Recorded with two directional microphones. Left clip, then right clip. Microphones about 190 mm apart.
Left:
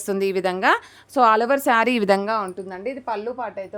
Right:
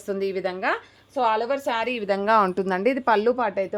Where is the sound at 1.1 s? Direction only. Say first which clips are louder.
Left 6 dB; 55° left (ahead or behind).